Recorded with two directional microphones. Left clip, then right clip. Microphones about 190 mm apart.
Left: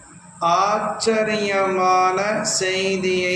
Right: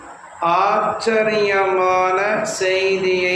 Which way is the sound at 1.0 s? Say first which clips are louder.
Right 1 dB; 40° left (ahead or behind).